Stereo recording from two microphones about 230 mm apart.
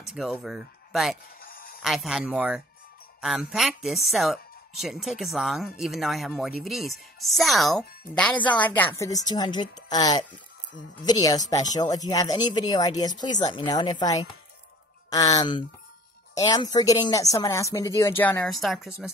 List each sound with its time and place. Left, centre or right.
0.0 s speech: centre
1.4 s a sound: left
1.8 s a woman's voice: centre